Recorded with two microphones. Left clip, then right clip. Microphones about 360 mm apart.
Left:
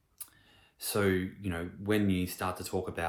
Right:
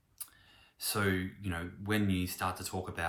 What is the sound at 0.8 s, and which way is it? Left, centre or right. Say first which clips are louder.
Speech: left 3 dB; centre.